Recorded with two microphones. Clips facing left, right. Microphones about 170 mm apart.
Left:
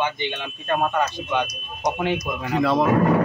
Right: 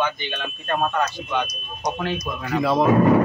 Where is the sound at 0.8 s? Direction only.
15° left (ahead or behind).